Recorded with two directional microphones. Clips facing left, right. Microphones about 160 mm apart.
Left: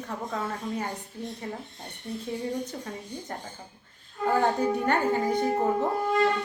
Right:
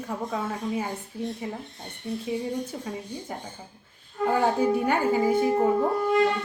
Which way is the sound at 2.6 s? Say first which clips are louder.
Right 3 dB; 5° right (ahead or behind).